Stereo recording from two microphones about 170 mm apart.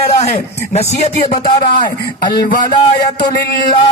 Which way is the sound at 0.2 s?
40° left (ahead or behind).